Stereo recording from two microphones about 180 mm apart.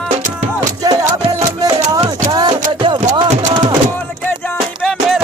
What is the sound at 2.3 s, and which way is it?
Music, 25° right (ahead or behind).